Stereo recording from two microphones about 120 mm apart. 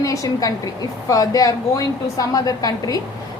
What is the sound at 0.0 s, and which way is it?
A woman's voice, 30° left (ahead or behind).